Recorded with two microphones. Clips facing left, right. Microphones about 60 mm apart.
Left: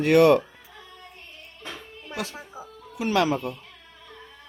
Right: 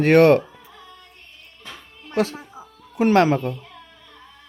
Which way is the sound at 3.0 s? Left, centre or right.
Right.